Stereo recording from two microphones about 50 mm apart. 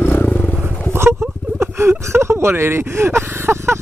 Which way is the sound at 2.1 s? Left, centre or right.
Right.